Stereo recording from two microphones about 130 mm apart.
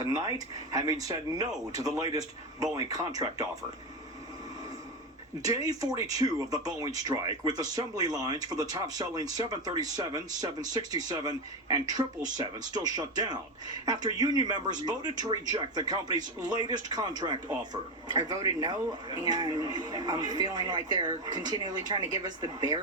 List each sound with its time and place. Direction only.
0.0 s speech: 30° right (ahead or behind)
5.4 s speech: 25° right (ahead or behind)